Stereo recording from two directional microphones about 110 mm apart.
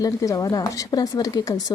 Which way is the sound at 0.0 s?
30° left (ahead or behind).